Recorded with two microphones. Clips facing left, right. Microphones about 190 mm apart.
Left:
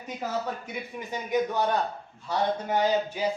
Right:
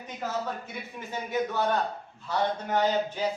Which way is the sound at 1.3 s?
15° left (ahead or behind).